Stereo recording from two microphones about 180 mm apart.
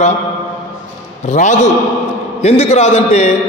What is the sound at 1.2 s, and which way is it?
A man's voice, 40° left (ahead or behind).